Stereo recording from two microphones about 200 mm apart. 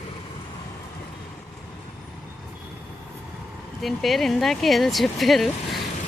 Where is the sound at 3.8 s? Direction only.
Centre (ahead or behind).